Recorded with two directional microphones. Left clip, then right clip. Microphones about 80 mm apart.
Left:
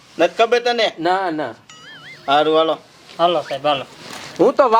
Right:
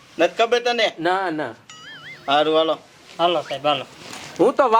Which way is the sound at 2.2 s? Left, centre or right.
Left.